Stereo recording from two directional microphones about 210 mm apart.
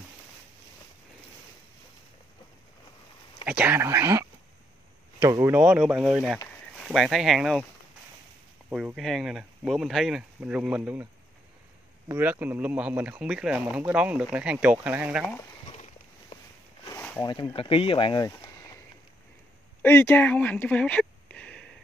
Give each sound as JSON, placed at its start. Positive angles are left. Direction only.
{"t": 3.4, "sound": "speech", "side_deg": -10}
{"t": 8.6, "sound": "speech", "side_deg": -5}
{"t": 12.1, "sound": "speech", "side_deg": -10}
{"t": 15.7, "sound": "a sound", "side_deg": 30}
{"t": 17.2, "sound": "speech", "side_deg": 20}
{"t": 19.8, "sound": "speech", "side_deg": 10}